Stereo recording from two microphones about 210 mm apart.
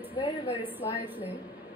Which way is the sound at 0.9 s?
10° right (ahead or behind).